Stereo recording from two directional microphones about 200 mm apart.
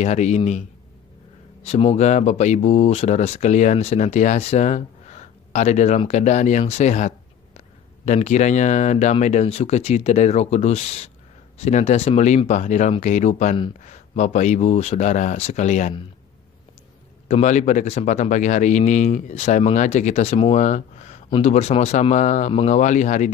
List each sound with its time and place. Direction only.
0.0 s speech: 35° left (ahead or behind)
1.6 s speech: 30° left (ahead or behind)
17.3 s speech: 35° left (ahead or behind)